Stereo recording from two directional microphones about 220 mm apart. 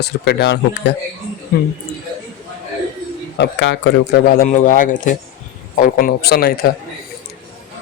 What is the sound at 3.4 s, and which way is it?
Speech, 55° left (ahead or behind).